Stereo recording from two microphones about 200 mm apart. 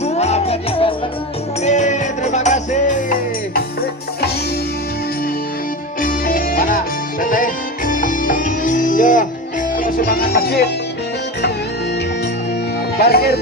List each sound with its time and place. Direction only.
0.0 s music: 35° left (ahead or behind)
6.0 s music: 45° left (ahead or behind)
13.0 s speech: 50° left (ahead or behind)